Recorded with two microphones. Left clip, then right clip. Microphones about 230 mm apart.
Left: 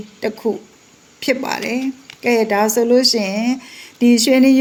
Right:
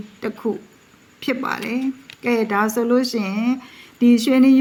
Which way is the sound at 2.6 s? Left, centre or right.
Centre.